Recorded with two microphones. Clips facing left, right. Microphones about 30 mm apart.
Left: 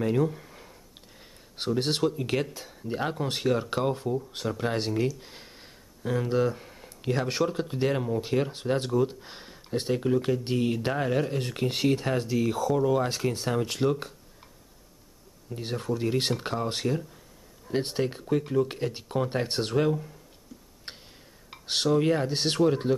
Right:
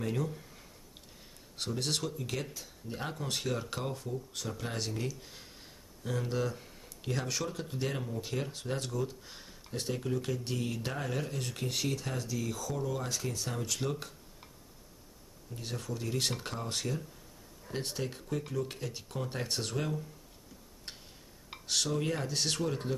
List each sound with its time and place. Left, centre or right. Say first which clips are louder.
0.0 s speech: left 9 dB; left
3.0 s speech: left 7 dB; left
5.2 s a sound: left 4 dB; left
7.2 s speech: left 9 dB; left
15.5 s speech: left 9 dB; left
20.9 s tick-tock: left 5 dB; left
21.6 s speech: left 9 dB; left